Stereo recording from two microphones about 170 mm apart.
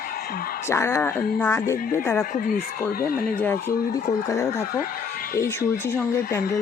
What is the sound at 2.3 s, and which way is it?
Speech, 50° left (ahead or behind).